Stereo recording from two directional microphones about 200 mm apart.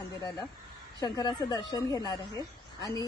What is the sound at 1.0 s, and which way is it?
A woman's voice, 20° left (ahead or behind).